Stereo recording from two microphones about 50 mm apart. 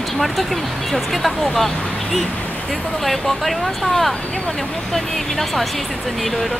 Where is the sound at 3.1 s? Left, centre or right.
Centre.